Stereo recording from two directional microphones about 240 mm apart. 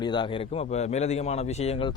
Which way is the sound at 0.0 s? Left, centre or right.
Centre.